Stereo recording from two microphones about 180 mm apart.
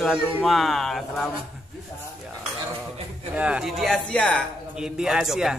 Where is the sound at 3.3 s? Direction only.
5° right (ahead or behind).